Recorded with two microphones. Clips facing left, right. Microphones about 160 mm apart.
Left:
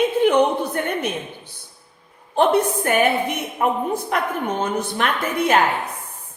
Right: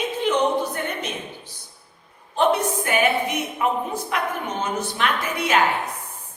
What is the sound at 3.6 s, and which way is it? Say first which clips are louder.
A woman's voice: left 4 dB; 45° left (ahead or behind).